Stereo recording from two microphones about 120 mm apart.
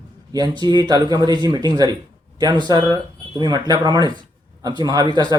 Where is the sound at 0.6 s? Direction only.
35° right (ahead or behind).